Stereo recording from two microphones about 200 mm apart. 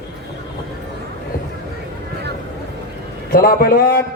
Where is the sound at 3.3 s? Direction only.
50° left (ahead or behind).